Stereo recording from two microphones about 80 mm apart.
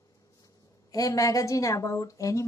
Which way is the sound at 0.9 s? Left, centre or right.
Left.